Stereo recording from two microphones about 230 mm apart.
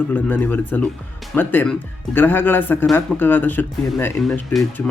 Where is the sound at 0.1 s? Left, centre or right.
Centre.